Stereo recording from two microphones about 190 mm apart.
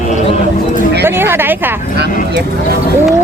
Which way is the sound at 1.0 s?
10° right (ahead or behind).